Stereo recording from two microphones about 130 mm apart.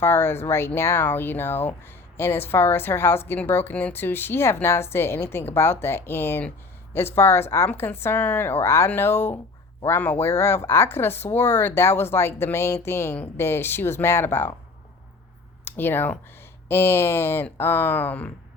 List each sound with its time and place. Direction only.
0.0 s speech: 15° left (ahead or behind)
15.6 s speech: 15° left (ahead or behind)